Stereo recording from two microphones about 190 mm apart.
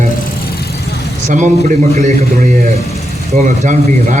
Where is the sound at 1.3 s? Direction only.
40° right (ahead or behind).